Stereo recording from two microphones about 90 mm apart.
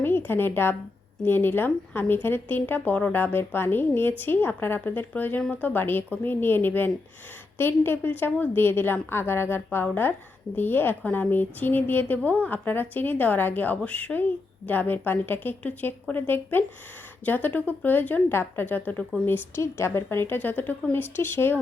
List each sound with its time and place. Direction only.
0.0 s a woman's voice: 25° left (ahead or behind)